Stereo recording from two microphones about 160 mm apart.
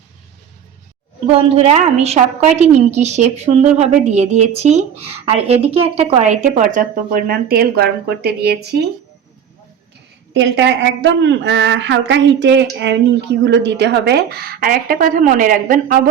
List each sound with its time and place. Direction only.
1.3 s a woman's voice: 40° right (ahead or behind); by 8.8 s 85° right
10.3 s female singing: 90° right
13.4 s a woman's voice: 90° right; by 16.0 s 60° right (ahead or behind)